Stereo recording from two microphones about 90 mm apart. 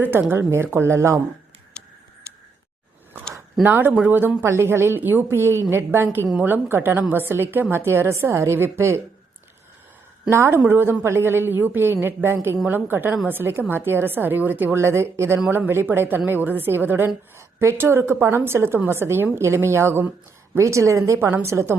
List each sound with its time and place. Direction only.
0.3 s a woman's voice: 25° right (ahead or behind)
1.7 s tick-tock: 10° left (ahead or behind)
3.6 s a woman's voice: 20° right (ahead or behind)
10.2 s a woman's voice: 30° right (ahead or behind)